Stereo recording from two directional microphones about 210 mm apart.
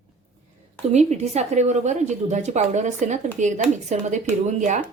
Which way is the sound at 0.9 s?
30° right (ahead or behind).